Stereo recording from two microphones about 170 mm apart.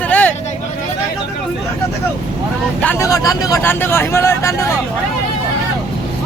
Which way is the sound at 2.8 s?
15° left (ahead or behind).